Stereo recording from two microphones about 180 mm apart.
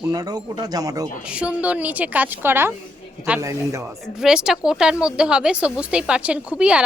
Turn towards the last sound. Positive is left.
turn(degrees=-5)  # may be behind; listen again after turning